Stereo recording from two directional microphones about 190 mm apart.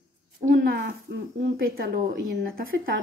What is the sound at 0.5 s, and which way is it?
A woman's voice, 60° right (ahead or behind).